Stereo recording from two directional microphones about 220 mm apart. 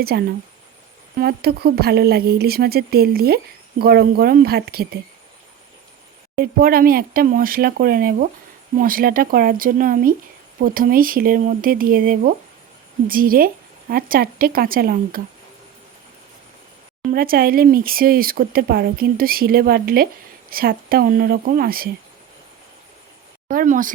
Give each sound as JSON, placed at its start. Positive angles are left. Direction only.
{"t": 0.0, "sound": "a woman's voice", "side_deg": -45}
{"t": 6.3, "sound": "speech", "side_deg": -40}
{"t": 17.1, "sound": "a woman's voice", "side_deg": -40}
{"t": 23.5, "sound": "speech", "side_deg": -40}